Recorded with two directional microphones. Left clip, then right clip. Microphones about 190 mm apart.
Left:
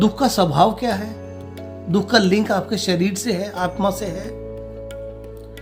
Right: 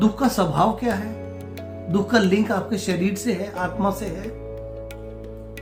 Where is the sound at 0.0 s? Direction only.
45° left (ahead or behind).